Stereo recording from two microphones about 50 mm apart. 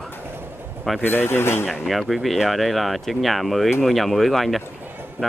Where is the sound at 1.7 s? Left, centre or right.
Centre.